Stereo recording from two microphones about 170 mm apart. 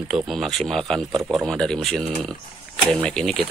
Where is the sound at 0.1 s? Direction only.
Centre (ahead or behind).